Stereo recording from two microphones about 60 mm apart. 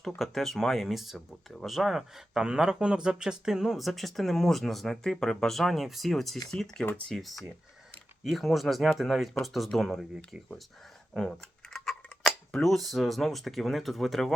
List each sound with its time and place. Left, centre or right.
0.2 s speech: centre
11.1 s a sound: centre
12.2 s speech: centre